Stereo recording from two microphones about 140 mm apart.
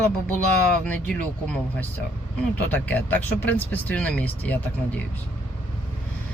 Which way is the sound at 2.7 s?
10° left (ahead or behind).